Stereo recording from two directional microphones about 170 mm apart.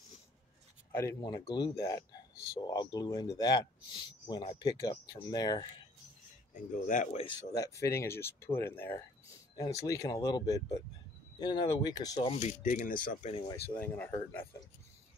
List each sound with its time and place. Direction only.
0.9 s speech: 15° left (ahead or behind)
6.5 s speech: 50° left (ahead or behind)
7.2 s speech: 20° left (ahead or behind)
12.4 s speech: 45° left (ahead or behind)
13.7 s speech: 10° left (ahead or behind)